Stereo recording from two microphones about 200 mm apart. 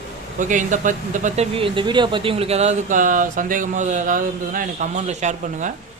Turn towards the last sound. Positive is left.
turn(degrees=-35)  # may be behind; listen again after turning